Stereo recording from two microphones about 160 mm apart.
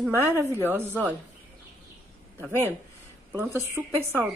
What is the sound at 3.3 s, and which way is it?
Speech, 15° right (ahead or behind).